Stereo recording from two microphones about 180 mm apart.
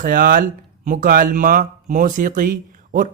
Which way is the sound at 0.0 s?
50° right (ahead or behind).